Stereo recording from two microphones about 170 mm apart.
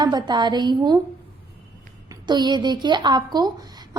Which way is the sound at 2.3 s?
25° right (ahead or behind).